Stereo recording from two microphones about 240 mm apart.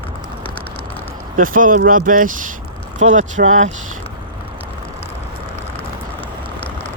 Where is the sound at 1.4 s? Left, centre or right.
Right.